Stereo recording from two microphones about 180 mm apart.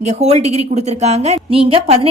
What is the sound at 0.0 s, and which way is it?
Speech, 35° right (ahead or behind).